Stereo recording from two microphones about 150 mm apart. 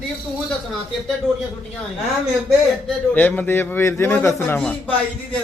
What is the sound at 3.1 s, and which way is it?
A man's voice, 10° left (ahead or behind).